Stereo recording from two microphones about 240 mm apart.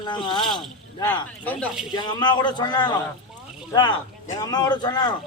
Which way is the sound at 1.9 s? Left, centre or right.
Centre.